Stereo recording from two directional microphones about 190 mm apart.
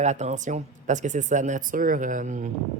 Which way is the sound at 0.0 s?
35° right (ahead or behind).